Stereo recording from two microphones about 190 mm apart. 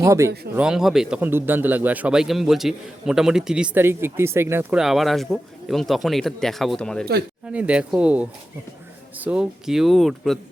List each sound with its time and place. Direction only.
0.0 s speech: 15° right (ahead or behind)
0.5 s a man's voice: 5° right (ahead or behind)
4.8 s a man's voice: centre (ahead or behind)
7.4 s a man's voice: 5° right (ahead or behind)